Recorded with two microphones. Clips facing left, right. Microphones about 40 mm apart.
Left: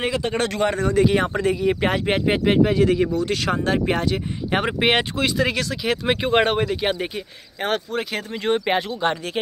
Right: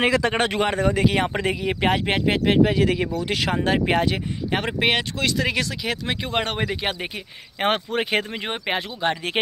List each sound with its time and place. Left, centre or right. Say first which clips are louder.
0.4 s speech: even; centre
0.7 s speech: left 3 dB; centre
2.6 s speech: left 2 dB; centre
4.5 s speech: left 2 dB; centre
5.5 s speech: left 2 dB; centre
6.0 s speech: left 9 dB; centre
6.6 s speech: left 3 dB; centre
7.6 s speech: right 2 dB; right
8.4 s speech: left 7 dB; centre
8.6 s speech: left 3 dB; centre